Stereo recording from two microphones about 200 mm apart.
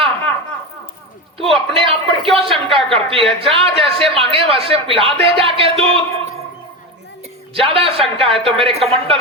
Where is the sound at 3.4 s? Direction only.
30° right (ahead or behind).